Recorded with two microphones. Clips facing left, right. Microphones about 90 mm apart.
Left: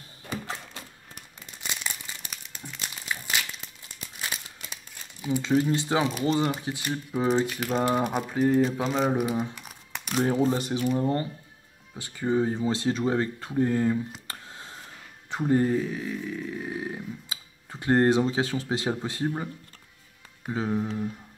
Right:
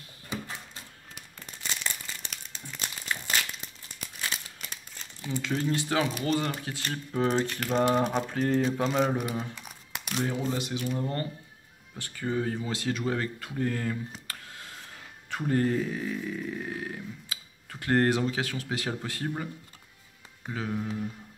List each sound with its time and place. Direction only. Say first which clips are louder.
2.2 s crumpling: left 1 dB; 5° left (ahead or behind)
5.2 s speech: left 6 dB; 15° left (ahead or behind)
9.1 s speech: left 5 dB; 15° left (ahead or behind)
9.6 s crumpling: left 1 dB; 5° left (ahead or behind)
10.0 s speech: left 7 dB; 40° left (ahead or behind); by 15.7 s 20° left (ahead or behind)
15.7 s a sound: left 2 dB; centre (ahead or behind)
16.6 s speech: left 3 dB; 15° left (ahead or behind)
20.5 s speech: left 5 dB; 25° left (ahead or behind)